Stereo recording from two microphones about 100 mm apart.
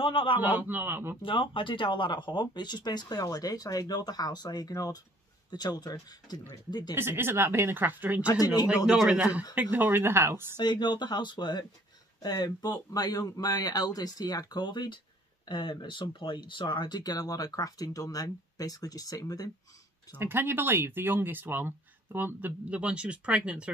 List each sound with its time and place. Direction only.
0.0 s speech: 60° left (ahead or behind)
0.4 s speech: 20° right (ahead or behind)
1.2 s speech: 60° left (ahead or behind); by 7.0 s 45° left (ahead or behind)
7.0 s speech: 25° right (ahead or behind)
8.3 s speech: 40° left (ahead or behind)
8.8 s a man's voice: 5° right (ahead or behind)
9.6 s speech: 20° right (ahead or behind)
10.6 s speech: 45° left (ahead or behind)
20.2 s speech: 20° right (ahead or behind)